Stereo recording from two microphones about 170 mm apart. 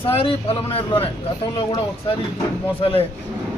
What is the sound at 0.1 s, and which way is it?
A man's voice, 35° left (ahead or behind).